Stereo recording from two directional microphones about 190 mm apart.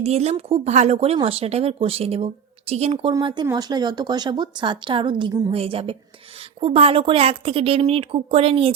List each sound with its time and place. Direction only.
0.0 s speech: 35° right (ahead or behind)